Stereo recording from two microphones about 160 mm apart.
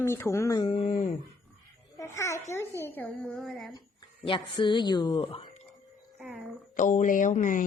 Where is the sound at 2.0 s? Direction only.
20° left (ahead or behind).